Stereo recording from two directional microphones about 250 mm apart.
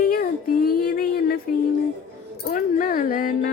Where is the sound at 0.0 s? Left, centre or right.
Left.